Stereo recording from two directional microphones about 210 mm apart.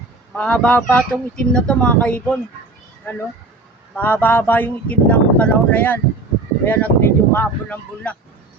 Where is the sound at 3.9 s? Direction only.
10° left (ahead or behind).